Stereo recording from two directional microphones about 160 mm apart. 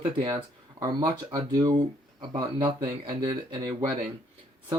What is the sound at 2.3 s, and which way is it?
Speech, 30° right (ahead or behind).